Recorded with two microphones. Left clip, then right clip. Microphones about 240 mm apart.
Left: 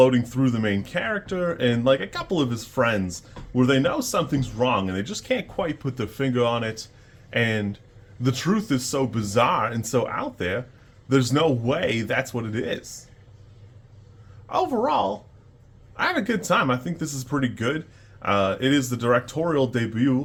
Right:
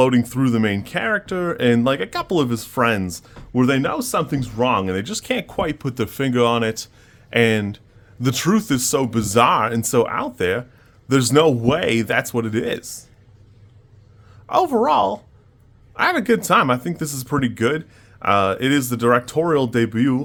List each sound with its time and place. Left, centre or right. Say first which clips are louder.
0.0 s speech: right 1 dB; right
14.4 s speech: right 6 dB; right